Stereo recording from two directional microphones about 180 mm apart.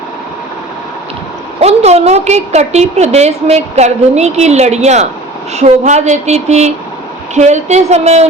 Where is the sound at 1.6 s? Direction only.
35° right (ahead or behind).